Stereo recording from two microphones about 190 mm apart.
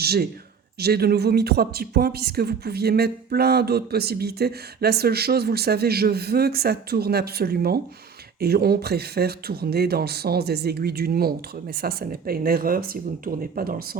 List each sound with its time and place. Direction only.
0.0 s a man's voice: 55° right (ahead or behind)